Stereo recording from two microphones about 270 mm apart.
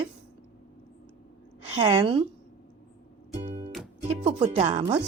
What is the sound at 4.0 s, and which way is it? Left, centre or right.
Music, right.